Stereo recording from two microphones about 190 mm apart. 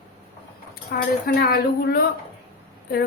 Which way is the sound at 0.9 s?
55° left (ahead or behind).